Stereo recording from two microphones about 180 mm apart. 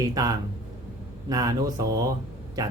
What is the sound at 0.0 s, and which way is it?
Speech, 20° right (ahead or behind).